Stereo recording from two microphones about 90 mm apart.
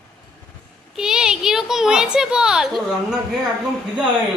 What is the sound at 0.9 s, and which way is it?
A child's voice, 5° right (ahead or behind).